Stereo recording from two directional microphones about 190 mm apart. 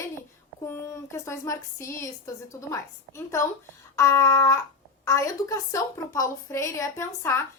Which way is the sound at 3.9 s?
15° left (ahead or behind).